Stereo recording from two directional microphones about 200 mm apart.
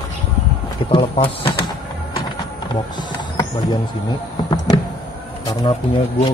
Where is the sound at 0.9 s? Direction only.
25° left (ahead or behind).